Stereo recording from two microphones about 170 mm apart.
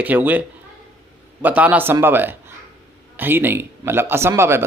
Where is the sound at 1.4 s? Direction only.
10° right (ahead or behind).